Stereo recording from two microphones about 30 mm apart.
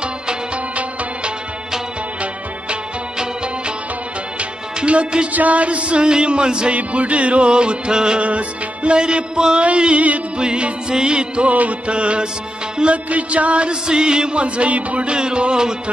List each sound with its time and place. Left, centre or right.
5.3 s music: right
6.7 s music: right
8.2 s music: right
8.9 s music: right
11.4 s music: right
11.9 s music: right
13.8 s music: right
14.4 s music: right
15.0 s music: right